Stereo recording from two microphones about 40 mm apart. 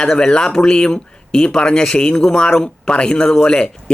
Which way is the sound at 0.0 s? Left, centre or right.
Left.